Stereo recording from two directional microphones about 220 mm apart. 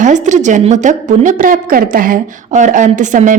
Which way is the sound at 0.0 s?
35° right (ahead or behind).